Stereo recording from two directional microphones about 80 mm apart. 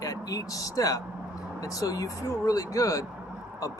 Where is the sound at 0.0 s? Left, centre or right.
Left.